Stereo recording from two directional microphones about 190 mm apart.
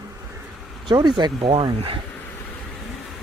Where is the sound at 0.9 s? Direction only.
20° right (ahead or behind).